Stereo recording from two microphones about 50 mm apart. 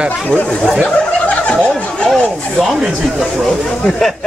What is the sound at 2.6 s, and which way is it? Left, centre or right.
Speech, centre.